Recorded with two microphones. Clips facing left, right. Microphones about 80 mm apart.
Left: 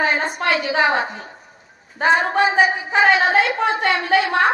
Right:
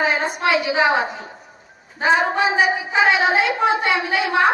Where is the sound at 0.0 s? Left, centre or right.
Centre.